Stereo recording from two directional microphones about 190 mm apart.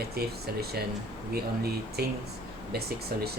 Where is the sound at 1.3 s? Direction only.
55° right (ahead or behind).